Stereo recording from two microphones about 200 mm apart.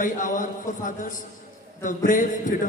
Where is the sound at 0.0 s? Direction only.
40° left (ahead or behind).